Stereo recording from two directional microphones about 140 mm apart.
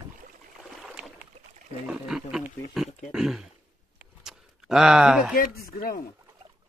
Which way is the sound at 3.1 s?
5° right (ahead or behind).